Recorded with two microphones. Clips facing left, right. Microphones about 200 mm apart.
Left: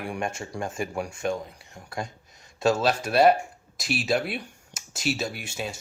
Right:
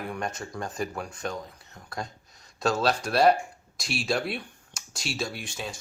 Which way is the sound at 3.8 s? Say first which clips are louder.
Left 3 dB; 5° left (ahead or behind).